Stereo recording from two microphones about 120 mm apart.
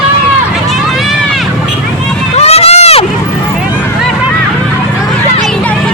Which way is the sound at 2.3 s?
60° left (ahead or behind).